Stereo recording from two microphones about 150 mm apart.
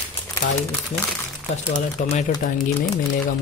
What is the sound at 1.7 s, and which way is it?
Speech, 55° left (ahead or behind).